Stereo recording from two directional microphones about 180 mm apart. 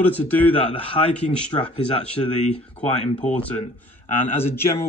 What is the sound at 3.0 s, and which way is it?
Speech, 40° left (ahead or behind).